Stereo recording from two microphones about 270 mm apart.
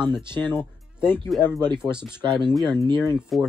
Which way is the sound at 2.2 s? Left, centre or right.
Centre.